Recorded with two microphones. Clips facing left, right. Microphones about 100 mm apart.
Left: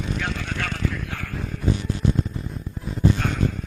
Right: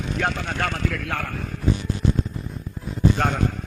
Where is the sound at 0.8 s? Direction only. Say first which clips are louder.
Right 3 dB; 70° right (ahead or behind).